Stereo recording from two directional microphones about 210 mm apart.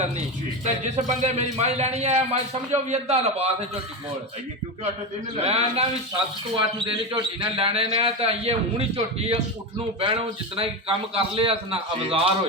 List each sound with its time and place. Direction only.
0.6 s a man's voice: 35° right (ahead or behind)
5.4 s a man's voice: 30° right (ahead or behind)
7.1 s a man's voice: 25° right (ahead or behind)